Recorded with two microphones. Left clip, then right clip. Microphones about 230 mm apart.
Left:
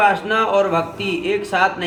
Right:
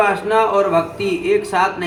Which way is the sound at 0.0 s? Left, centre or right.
Left.